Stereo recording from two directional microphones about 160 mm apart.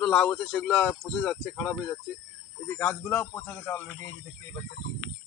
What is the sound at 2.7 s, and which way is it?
Speech, 10° left (ahead or behind).